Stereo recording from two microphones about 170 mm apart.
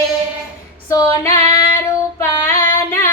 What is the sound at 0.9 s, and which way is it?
Female singing, 15° left (ahead or behind).